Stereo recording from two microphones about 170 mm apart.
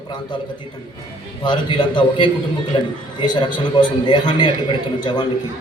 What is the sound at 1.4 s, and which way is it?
A man's voice, 25° left (ahead or behind).